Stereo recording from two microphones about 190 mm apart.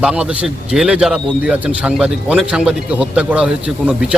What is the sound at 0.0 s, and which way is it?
A man's voice, 5° right (ahead or behind).